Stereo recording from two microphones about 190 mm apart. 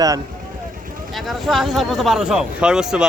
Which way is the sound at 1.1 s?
Centre (ahead or behind).